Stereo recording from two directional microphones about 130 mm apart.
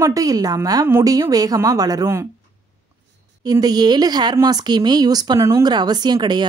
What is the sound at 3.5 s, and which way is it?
Speech, 30° right (ahead or behind).